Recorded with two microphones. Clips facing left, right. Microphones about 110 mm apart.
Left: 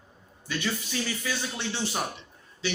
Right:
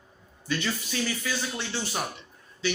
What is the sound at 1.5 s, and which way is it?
Speech, 25° left (ahead or behind).